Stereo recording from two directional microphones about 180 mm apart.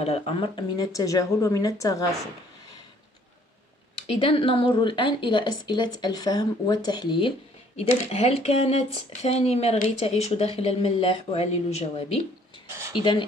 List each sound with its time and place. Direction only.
0.0 s speech: 35° left (ahead or behind); by 2.0 s 20° left (ahead or behind)
4.2 s a woman's voice: 30° left (ahead or behind)